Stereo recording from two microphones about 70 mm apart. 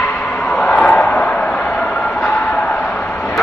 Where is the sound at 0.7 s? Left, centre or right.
Centre.